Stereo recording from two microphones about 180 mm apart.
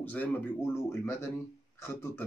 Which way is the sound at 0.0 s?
10° left (ahead or behind).